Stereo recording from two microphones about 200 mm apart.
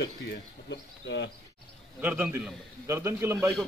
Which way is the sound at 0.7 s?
60° left (ahead or behind).